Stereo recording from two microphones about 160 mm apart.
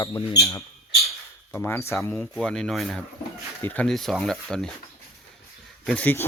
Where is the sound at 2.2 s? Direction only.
5° left (ahead or behind).